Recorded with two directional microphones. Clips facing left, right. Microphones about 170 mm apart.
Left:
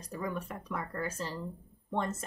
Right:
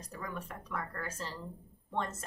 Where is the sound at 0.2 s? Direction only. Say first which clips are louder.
Left 5 dB; 15° left (ahead or behind).